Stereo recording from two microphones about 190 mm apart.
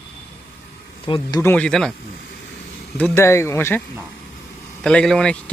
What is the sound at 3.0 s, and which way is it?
Speech, 15° left (ahead or behind).